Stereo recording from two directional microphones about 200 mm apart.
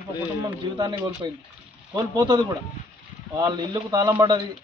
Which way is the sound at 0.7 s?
20° right (ahead or behind).